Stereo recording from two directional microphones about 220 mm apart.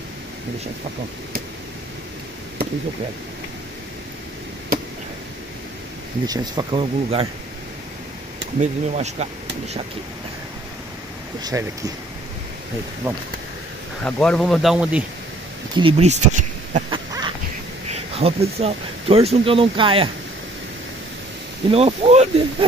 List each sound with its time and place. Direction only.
6.2 s speech: 20° right (ahead or behind)
8.5 s speech: 30° right (ahead or behind)
11.4 s speech: 15° right (ahead or behind)
14.0 s speech: 5° left (ahead or behind)
15.7 s a sound: 25° right (ahead or behind)
16.9 s a sound: 20° right (ahead or behind)
17.8 s speech: 30° right (ahead or behind)
21.6 s speech: 25° right (ahead or behind)